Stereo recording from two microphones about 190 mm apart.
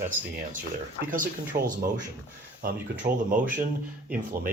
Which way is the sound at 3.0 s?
45° right (ahead or behind).